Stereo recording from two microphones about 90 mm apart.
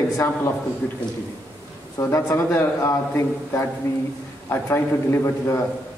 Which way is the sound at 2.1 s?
25° left (ahead or behind).